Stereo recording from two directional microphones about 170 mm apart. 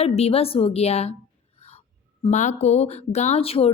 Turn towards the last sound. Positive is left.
turn(degrees=35)  # may be behind; listen again after turning